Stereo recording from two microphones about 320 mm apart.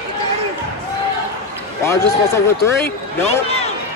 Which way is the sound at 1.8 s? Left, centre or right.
Centre.